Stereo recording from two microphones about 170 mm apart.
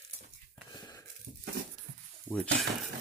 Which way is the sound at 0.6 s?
25° left (ahead or behind).